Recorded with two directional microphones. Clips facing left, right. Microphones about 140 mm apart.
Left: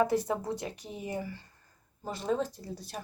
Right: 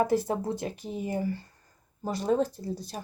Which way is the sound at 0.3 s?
35° right (ahead or behind).